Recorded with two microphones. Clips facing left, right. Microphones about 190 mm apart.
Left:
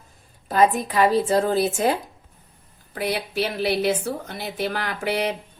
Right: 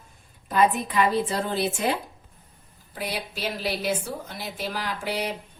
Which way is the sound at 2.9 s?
65° left (ahead or behind).